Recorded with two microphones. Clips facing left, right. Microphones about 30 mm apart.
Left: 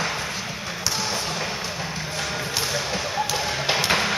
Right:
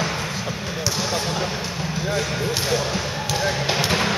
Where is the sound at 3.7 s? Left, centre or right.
Centre.